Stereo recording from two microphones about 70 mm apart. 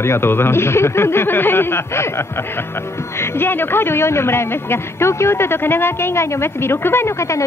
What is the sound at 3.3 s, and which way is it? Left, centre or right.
A woman's voice, left.